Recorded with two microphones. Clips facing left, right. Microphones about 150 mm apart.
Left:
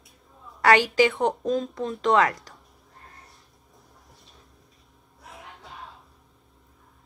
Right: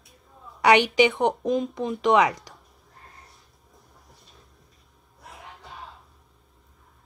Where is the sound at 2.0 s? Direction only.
15° right (ahead or behind).